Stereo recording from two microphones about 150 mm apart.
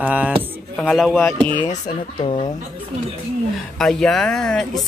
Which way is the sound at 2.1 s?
35° left (ahead or behind).